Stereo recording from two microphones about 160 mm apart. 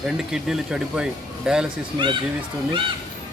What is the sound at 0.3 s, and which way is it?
Speech, 5° right (ahead or behind).